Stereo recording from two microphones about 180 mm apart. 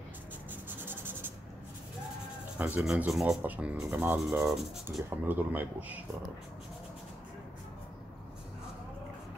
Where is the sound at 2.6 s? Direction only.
5° right (ahead or behind).